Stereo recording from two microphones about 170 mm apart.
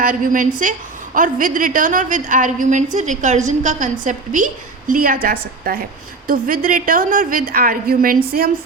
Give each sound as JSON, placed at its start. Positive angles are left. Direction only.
{"t": 0.0, "sound": "a woman's voice", "side_deg": -55}